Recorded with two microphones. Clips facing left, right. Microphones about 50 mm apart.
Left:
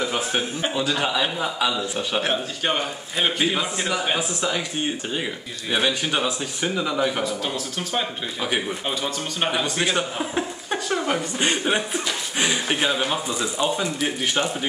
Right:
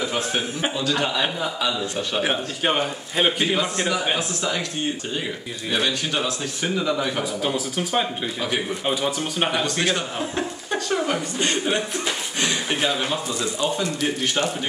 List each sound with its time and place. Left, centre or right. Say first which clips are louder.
0.0 s a man's voice: even; centre
2.2 s speech: right 1 dB; centre
3.3 s a man's voice: right 1 dB; centre
5.7 s speech: left 1 dB; centre
7.2 s speech: right 2 dB; centre
9.5 s speech: left 2 dB; centre